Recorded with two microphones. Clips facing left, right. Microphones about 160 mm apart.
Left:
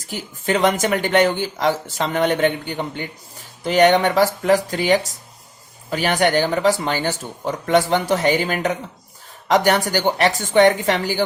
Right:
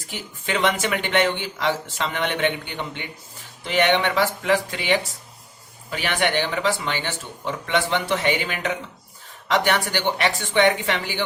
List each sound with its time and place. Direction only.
0.1 s speech: 40° left (ahead or behind)